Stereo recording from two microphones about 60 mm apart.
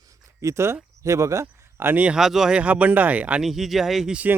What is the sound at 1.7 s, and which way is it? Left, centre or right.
Speech, right.